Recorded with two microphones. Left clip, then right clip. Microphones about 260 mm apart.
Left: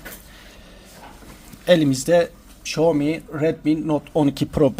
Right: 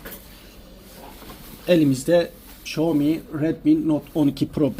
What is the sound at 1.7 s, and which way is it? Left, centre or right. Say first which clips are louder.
Speech: left 2 dB; left.